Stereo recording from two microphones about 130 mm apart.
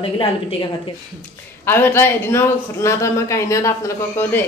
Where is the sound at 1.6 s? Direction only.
15° left (ahead or behind).